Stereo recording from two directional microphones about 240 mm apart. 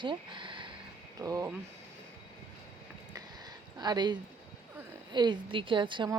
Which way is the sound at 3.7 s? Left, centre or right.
Centre.